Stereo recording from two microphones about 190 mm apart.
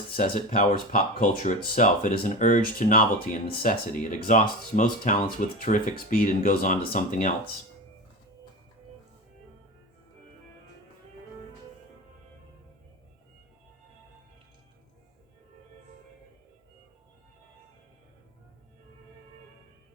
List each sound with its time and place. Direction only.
0.2 s speech: 45° left (ahead or behind)